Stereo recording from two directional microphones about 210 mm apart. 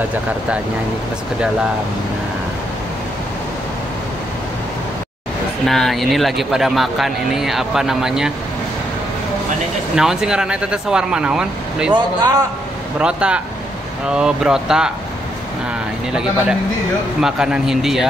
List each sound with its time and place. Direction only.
5.7 s speech: centre (ahead or behind)
9.9 s speech: 5° right (ahead or behind)
11.9 s a man's voice: 15° right (ahead or behind)
13.0 s speech: 5° right (ahead or behind)
16.1 s speech: 5° right (ahead or behind)